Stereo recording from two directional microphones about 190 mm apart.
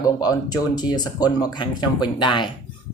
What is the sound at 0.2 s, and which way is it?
Speech, 20° left (ahead or behind).